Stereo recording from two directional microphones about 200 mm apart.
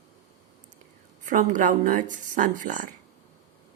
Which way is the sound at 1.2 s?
40° right (ahead or behind).